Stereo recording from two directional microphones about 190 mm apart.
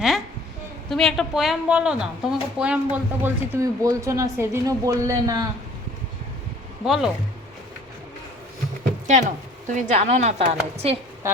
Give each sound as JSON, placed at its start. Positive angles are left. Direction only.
{"t": 0.9, "sound": "a woman's voice", "side_deg": 0}
{"t": 6.8, "sound": "speech", "side_deg": 0}
{"t": 9.0, "sound": "speech", "side_deg": -40}